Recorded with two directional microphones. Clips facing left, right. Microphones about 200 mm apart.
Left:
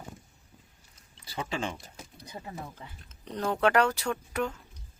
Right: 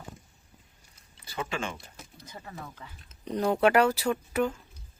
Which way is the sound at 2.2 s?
20° left (ahead or behind).